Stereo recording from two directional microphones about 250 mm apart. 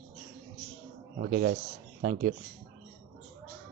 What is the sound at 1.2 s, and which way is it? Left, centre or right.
Speech, right.